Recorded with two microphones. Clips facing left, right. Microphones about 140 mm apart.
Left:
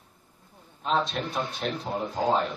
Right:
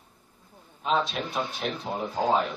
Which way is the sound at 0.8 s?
Centre (ahead or behind).